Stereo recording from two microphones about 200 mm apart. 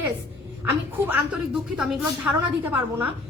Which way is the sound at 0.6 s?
10° right (ahead or behind).